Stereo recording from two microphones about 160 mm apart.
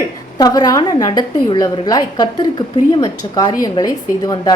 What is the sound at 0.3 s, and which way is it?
A woman's voice, 25° left (ahead or behind).